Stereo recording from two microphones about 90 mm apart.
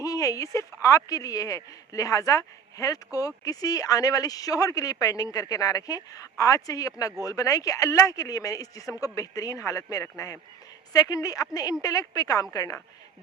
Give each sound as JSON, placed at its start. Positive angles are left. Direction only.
{"t": 0.0, "sound": "a woman's voice", "side_deg": 40}